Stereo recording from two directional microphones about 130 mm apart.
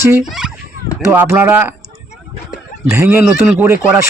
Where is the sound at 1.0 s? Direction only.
15° right (ahead or behind).